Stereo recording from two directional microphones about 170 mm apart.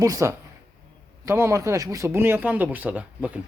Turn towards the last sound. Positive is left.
turn(degrees=-10)  # may be behind; listen again after turning